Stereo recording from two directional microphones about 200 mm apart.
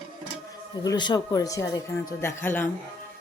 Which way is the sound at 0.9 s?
20° left (ahead or behind).